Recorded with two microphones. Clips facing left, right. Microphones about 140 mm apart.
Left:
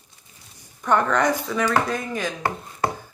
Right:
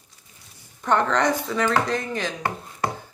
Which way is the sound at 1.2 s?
20° right (ahead or behind).